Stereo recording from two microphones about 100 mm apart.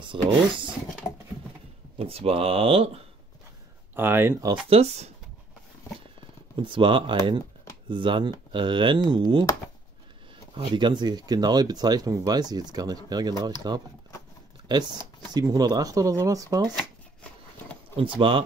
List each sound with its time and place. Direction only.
0.0 s speech: 55° right (ahead or behind)
2.0 s speech: 75° right (ahead or behind)
3.9 s speech: 20° right (ahead or behind)
4.6 s speech: 85° right
6.5 s speech: 55° right (ahead or behind)
10.5 s speech: 50° right (ahead or behind)
16.7 s shuffling cards: 10° left (ahead or behind)
17.9 s speech: 60° right (ahead or behind)